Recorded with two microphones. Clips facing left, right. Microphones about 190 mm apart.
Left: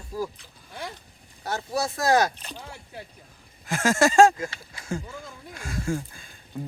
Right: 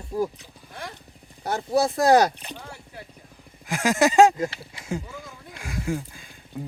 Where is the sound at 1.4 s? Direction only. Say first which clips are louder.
Right 6 dB; 30° right (ahead or behind).